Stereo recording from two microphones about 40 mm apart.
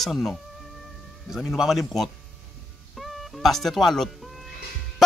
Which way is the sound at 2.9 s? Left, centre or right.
Centre.